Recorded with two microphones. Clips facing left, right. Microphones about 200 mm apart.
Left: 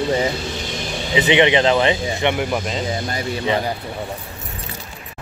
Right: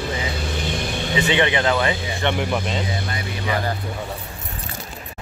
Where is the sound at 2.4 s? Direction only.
5° left (ahead or behind).